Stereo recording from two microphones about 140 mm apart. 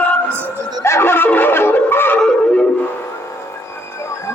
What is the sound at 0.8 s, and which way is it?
Music, 20° left (ahead or behind).